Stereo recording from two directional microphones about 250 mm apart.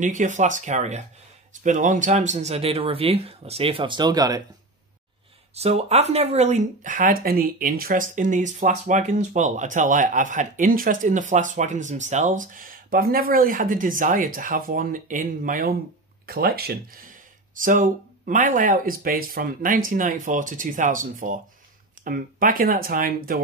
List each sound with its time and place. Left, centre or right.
0.0 s speech: right
5.5 s speech: right